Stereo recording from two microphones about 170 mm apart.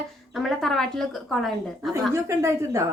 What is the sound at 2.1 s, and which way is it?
Speech, 15° right (ahead or behind).